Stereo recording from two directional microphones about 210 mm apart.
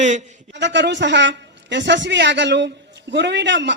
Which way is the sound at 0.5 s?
55° right (ahead or behind).